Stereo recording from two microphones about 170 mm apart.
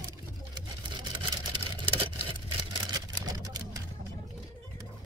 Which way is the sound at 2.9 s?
20° right (ahead or behind).